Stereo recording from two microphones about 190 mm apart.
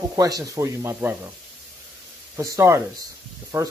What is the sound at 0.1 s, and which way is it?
Speech, 20° right (ahead or behind).